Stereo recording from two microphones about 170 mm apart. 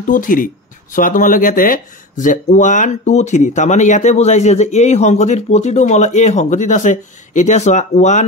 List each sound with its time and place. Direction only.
0.0 s speech: 55° left (ahead or behind)